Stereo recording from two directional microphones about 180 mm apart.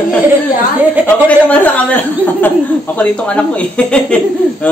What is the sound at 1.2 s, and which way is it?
Speech, 10° left (ahead or behind).